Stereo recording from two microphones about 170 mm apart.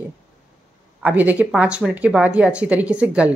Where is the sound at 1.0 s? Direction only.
10° right (ahead or behind).